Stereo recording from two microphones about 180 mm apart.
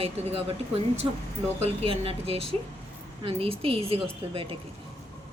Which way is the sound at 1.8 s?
30° right (ahead or behind).